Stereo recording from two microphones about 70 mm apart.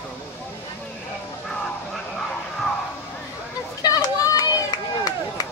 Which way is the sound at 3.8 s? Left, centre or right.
Left.